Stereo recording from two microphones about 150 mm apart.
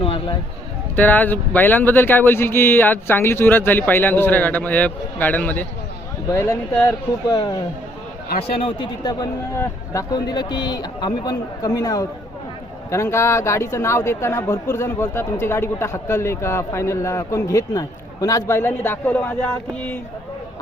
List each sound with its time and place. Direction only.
0.0 s a sound: 35° left (ahead or behind)
0.9 s a man's voice: 10° left (ahead or behind); by 8.9 s 35° left (ahead or behind)
9.6 s a man's voice: 20° left (ahead or behind)